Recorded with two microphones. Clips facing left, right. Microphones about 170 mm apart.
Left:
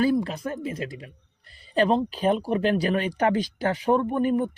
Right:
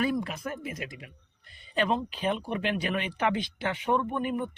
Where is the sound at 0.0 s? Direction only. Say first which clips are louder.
Left 6 dB; 30° left (ahead or behind).